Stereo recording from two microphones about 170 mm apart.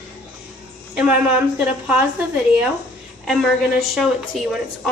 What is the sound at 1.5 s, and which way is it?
A woman's voice, 5° right (ahead or behind).